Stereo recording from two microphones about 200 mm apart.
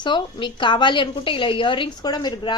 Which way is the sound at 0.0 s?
25° left (ahead or behind).